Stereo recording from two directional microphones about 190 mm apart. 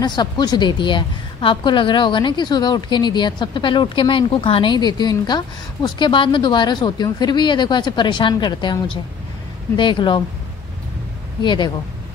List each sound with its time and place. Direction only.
0.0 s a woman's voice: 20° left (ahead or behind)
11.4 s a woman's voice: 25° left (ahead or behind)